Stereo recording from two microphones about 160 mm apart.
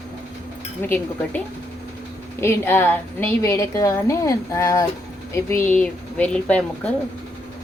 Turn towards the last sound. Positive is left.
turn(degrees=10)  # may be behind; listen again after turning